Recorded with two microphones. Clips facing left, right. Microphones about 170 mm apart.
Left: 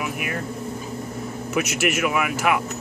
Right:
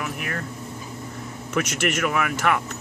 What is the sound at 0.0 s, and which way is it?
Vehicle, 10° left (ahead or behind).